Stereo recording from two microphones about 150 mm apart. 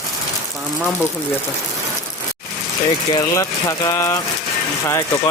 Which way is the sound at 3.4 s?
20° left (ahead or behind).